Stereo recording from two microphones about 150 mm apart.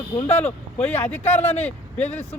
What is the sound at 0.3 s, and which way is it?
Speech, 10° left (ahead or behind).